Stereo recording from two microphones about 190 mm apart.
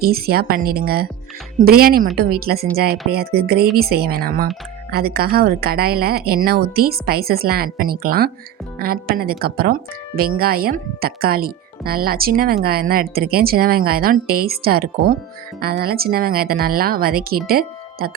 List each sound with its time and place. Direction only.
0.0 s speech: 55° right (ahead or behind)